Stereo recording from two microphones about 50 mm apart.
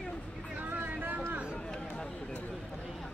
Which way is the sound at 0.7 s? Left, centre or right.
Right.